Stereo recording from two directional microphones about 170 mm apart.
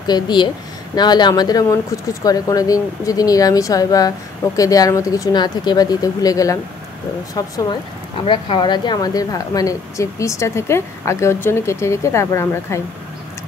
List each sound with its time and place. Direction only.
0.0 s speech: 25° left (ahead or behind)